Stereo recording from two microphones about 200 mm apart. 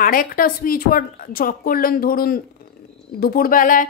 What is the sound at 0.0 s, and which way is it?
Speech, 45° left (ahead or behind).